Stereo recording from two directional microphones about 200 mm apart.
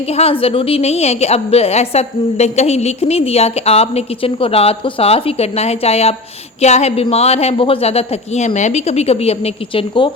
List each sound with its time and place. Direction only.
0.1 s a woman's voice: 30° left (ahead or behind)